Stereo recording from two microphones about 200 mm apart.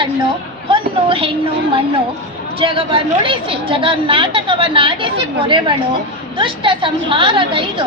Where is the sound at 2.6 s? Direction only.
25° right (ahead or behind).